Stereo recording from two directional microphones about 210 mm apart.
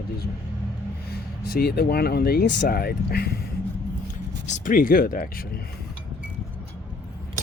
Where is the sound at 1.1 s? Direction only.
45° left (ahead or behind).